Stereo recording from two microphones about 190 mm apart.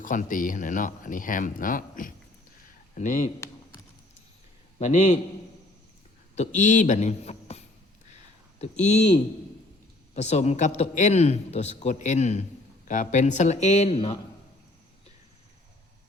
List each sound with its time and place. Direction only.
0.0 s speech: 45° left (ahead or behind)
4.8 s a man's voice: 40° left (ahead or behind)
6.3 s a man's voice: 40° left (ahead or behind)
8.1 s a sound: 35° left (ahead or behind)
8.8 s a man's voice: 35° left (ahead or behind)
10.2 s a man's voice: 35° left (ahead or behind)